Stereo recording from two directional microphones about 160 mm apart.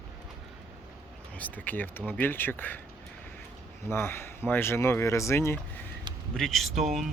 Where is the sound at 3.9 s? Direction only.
15° left (ahead or behind).